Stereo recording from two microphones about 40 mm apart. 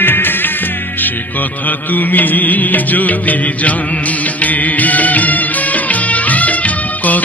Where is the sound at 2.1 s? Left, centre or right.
Left.